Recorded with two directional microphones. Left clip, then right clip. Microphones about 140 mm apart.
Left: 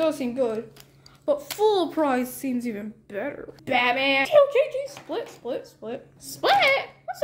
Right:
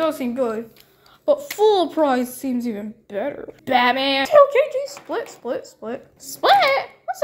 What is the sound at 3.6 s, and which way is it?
A child's voice, 30° right (ahead or behind).